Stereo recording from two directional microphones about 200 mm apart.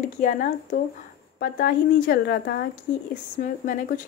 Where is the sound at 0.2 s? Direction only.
40° left (ahead or behind).